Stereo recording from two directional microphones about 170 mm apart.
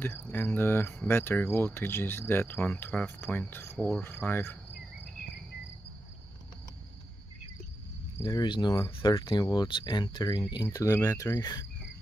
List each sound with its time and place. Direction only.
0.3 s speech: 10° left (ahead or behind)
8.2 s speech: 25° left (ahead or behind)